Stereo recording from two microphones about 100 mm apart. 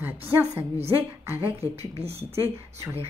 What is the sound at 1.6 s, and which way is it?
Speech, 90° right.